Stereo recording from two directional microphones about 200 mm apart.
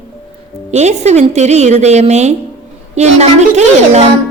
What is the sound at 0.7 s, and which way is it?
A child's voice, 35° right (ahead or behind).